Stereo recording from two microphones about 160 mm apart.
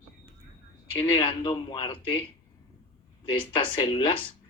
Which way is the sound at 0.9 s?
30° left (ahead or behind).